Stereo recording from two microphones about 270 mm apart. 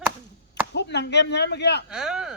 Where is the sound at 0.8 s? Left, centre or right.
Left.